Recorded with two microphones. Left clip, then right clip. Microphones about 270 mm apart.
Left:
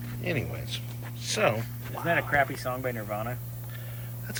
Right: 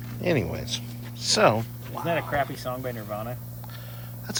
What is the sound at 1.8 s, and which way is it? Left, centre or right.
Speech, centre.